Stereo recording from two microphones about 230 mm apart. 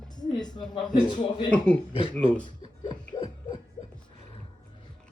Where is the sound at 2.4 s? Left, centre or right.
Centre.